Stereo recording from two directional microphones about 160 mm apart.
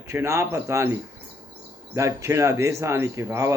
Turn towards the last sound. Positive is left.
turn(degrees=-20)  # may be behind; listen again after turning